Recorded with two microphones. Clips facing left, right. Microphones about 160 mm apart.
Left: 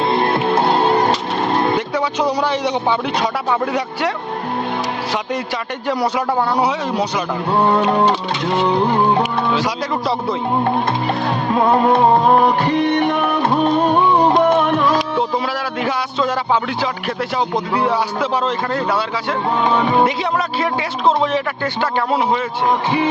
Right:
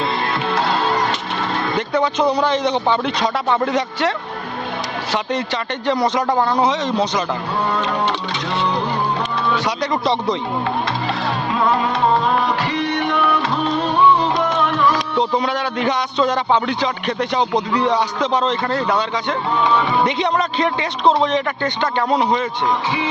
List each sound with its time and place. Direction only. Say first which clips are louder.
0.0 s music: left 5 dB; 50° left (ahead or behind)
1.9 s a man's voice: right 1 dB; 10° left (ahead or behind)
5.9 s a man's voice: right 1 dB; 10° left (ahead or behind)
8.5 s music: left 5 dB; 55° left (ahead or behind)
9.6 s a man's voice: even; 10° left (ahead or behind)
11.7 s music: left 6 dB; 50° left (ahead or behind)
15.8 s speech: right 1 dB; 5° left (ahead or behind)
20.6 s a man's voice: even; 5° left (ahead or behind)